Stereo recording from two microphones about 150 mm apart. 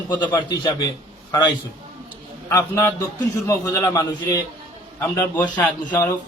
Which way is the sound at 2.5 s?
20° left (ahead or behind).